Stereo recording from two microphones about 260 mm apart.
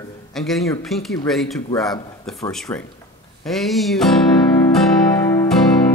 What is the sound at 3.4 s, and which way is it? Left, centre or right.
Speech, centre.